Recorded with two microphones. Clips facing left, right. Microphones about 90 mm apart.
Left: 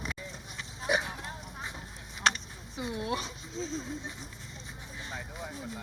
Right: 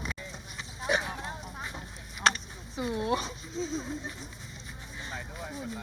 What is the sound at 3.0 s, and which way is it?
Speech, 35° right (ahead or behind).